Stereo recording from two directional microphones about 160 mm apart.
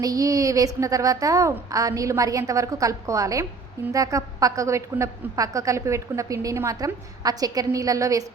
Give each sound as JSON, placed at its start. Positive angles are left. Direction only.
{"t": 0.0, "sound": "a woman's voice", "side_deg": -20}